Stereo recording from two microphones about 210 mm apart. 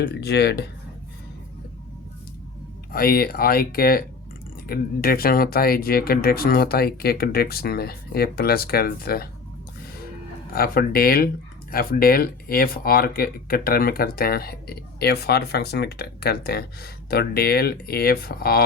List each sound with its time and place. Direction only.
0.1 s speech: 50° left (ahead or behind)
2.9 s speech: 45° left (ahead or behind)
10.5 s speech: 45° left (ahead or behind)